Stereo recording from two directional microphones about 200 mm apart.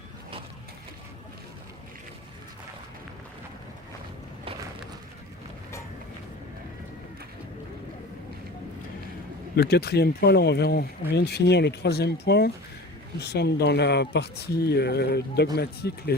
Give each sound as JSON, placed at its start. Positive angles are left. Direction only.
{"t": 9.6, "sound": "speech", "side_deg": 55}